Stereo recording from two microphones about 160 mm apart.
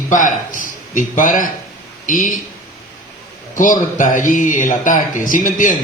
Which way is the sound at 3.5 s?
55° left (ahead or behind).